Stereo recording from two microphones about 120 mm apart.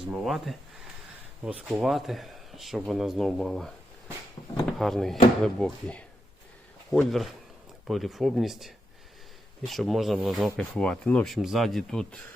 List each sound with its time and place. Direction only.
0.1 s speech: centre (ahead or behind)
4.8 s speech: centre (ahead or behind)